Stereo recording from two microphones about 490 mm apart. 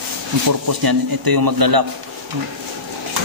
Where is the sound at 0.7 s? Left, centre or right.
Right.